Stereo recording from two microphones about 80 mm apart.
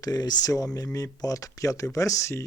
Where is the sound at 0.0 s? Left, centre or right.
Left.